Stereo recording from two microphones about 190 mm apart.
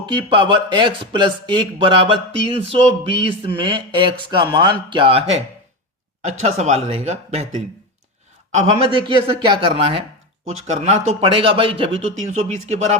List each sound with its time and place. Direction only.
0.0 s speech: 25° right (ahead or behind)
6.4 s speech: 35° right (ahead or behind)
8.5 s speech: 30° right (ahead or behind)